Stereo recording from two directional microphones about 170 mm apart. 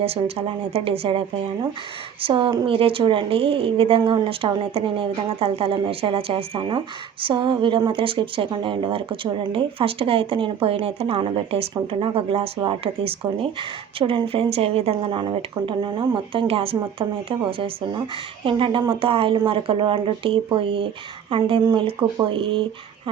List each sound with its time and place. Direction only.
0.0 s speech: 35° right (ahead or behind)
2.2 s speech: 30° right (ahead or behind)